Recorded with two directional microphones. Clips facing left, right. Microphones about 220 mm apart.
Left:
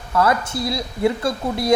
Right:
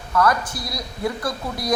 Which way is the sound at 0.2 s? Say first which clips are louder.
Left 2 dB; 25° left (ahead or behind).